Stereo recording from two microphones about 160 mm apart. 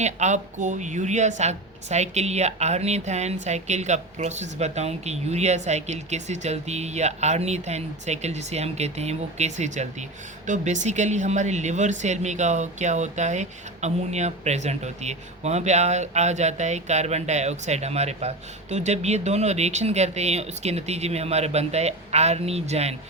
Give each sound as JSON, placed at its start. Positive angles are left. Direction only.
{"t": 0.0, "sound": "speech", "side_deg": -45}